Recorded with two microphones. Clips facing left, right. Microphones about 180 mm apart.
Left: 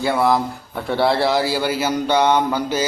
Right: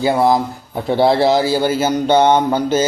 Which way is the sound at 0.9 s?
40° right (ahead or behind).